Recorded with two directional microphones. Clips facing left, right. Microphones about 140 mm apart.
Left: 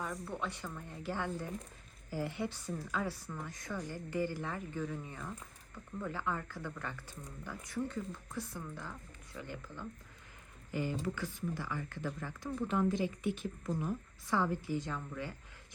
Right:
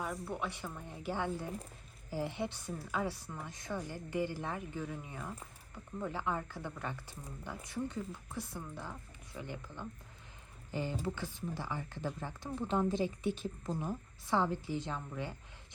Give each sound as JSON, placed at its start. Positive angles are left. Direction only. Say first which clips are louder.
{"t": 0.0, "sound": "a woman's voice", "louder": "right 1 dB", "side_deg": -10}